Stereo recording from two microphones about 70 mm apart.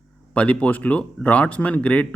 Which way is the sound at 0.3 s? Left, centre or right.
Centre.